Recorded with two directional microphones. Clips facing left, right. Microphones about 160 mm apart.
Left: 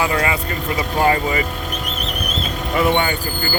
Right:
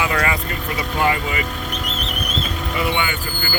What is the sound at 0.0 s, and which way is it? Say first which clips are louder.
Speech: left 2 dB; 30° left (ahead or behind).